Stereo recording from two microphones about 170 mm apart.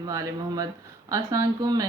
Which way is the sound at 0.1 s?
20° right (ahead or behind).